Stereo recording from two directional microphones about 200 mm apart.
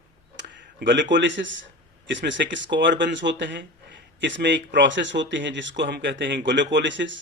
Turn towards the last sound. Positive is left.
turn(degrees=-65)  # may be behind; listen again after turning